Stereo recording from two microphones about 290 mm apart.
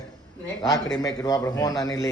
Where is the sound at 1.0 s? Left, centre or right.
Centre.